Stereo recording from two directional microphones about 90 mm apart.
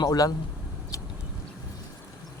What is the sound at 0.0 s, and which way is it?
Speech, 45° left (ahead or behind).